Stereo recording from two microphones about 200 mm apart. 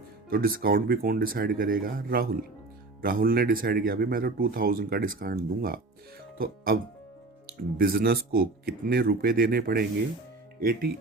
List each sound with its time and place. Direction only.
0.3 s speech: 45° right (ahead or behind)
7.4 s speech: 50° right (ahead or behind)